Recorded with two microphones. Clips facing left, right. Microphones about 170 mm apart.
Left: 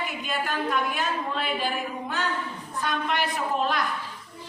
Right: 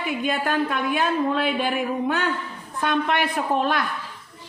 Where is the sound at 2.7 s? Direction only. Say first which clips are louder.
Right 5 dB; 55° right (ahead or behind).